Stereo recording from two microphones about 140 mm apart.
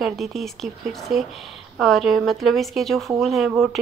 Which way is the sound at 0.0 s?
Centre (ahead or behind).